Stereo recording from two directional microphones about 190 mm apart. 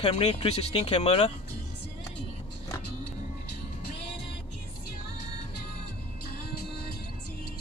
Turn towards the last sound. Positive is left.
turn(degrees=55)  # may be behind; listen again after turning